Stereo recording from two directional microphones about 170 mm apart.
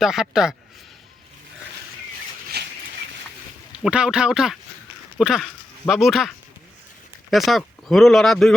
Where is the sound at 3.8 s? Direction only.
5° right (ahead or behind).